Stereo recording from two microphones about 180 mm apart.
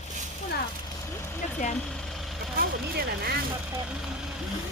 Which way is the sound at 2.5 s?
60° right (ahead or behind).